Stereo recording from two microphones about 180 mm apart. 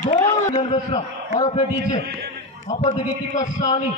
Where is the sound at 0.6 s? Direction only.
25° left (ahead or behind).